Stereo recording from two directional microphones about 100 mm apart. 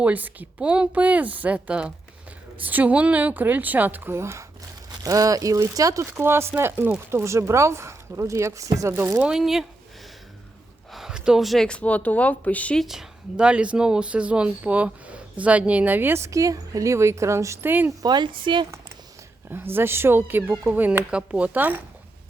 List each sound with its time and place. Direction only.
0.0 s speech: 15° right (ahead or behind)
9.1 s speech: 10° right (ahead or behind)
10.9 s speech: 5° right (ahead or behind); by 12.8 s 15° left (ahead or behind)
12.8 s speech: 5° right (ahead or behind); by 17.9 s 20° right (ahead or behind)
18.0 s speech: 50° right (ahead or behind)
19.5 s speech: 20° right (ahead or behind)